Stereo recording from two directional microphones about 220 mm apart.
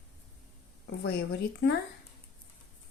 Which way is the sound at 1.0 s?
50° left (ahead or behind).